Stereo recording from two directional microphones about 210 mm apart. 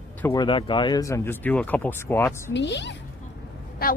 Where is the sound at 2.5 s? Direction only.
55° left (ahead or behind).